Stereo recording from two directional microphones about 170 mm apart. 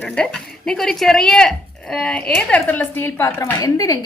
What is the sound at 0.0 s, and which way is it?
Speech, 5° left (ahead or behind).